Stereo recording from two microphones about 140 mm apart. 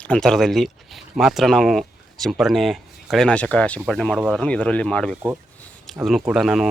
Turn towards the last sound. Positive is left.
turn(degrees=-5)  # may be behind; listen again after turning